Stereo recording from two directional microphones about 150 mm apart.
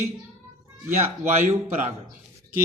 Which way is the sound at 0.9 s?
15° right (ahead or behind).